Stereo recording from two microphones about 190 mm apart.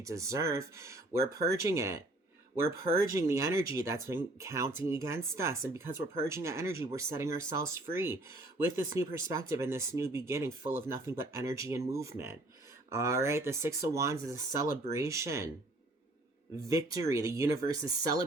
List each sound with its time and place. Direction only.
0.0 s speech: 15° right (ahead or behind)
16.6 s speech: 15° right (ahead or behind)